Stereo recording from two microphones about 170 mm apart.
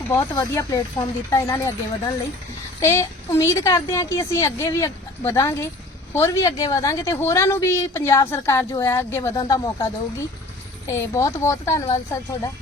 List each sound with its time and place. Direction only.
0.1 s speech: 20° left (ahead or behind)
2.8 s speech: 15° left (ahead or behind)